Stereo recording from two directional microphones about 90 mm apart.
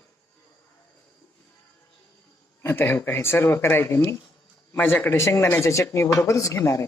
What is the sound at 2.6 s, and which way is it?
A man's voice, 25° left (ahead or behind).